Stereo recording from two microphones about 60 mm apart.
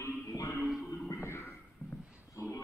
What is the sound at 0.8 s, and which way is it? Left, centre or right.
Music, left.